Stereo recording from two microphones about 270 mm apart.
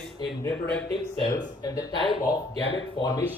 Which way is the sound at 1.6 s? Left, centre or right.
Centre.